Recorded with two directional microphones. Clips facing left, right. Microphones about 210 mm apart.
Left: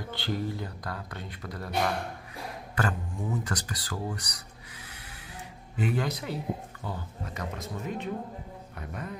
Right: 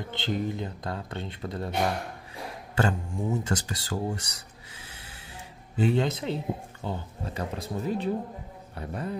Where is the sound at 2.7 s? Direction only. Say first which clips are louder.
Right 4 dB; 25° right (ahead or behind).